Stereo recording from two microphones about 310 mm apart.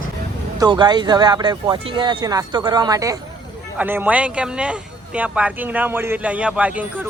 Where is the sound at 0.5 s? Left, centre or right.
Centre.